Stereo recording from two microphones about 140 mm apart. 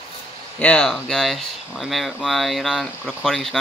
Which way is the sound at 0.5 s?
10° left (ahead or behind).